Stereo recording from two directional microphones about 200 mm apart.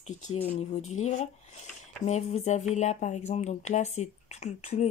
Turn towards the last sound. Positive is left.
turn(degrees=35)  # may be behind; listen again after turning